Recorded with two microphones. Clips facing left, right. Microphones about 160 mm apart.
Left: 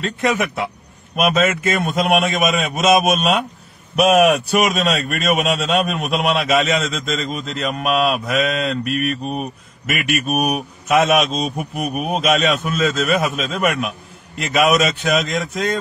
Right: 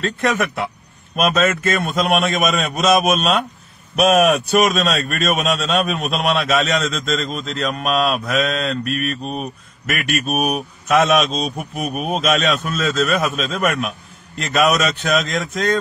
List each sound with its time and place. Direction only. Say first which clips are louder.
0.0 s a man's voice: even; 5° left (ahead or behind)